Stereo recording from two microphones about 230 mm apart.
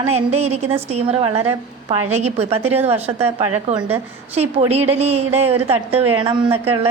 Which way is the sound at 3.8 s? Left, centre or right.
Centre.